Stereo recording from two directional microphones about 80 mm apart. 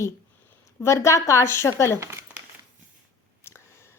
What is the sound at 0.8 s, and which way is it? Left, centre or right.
A woman's voice, left.